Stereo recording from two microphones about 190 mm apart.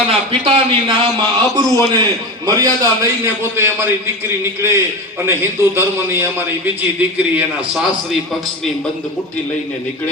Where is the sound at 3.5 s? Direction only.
15° right (ahead or behind).